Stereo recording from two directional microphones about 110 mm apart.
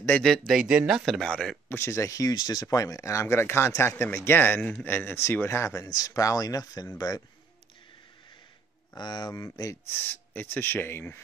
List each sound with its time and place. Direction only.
0.5 s speech: 5° right (ahead or behind)
1.7 s speech: 25° left (ahead or behind)
8.9 s speech: 40° left (ahead or behind)
9.3 s speech: 30° left (ahead or behind)
9.9 s speech: 15° left (ahead or behind)